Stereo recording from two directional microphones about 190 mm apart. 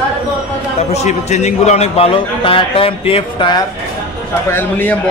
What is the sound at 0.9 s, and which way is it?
A man's voice, 35° left (ahead or behind).